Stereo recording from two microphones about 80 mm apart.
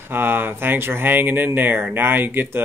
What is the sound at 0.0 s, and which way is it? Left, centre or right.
Speech, right.